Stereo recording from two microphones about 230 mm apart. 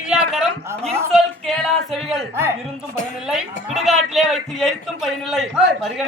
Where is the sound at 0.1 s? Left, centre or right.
Centre.